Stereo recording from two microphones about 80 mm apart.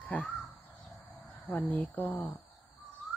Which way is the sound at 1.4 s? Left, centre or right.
Left.